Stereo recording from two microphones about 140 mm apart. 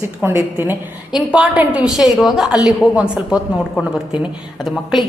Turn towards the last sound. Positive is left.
turn(degrees=0)  # may be behind; listen again after turning